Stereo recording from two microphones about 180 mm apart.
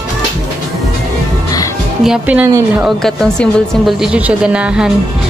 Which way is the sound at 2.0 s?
5° right (ahead or behind).